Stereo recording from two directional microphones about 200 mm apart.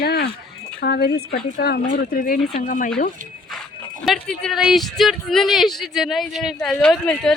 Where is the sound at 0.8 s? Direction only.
55° left (ahead or behind).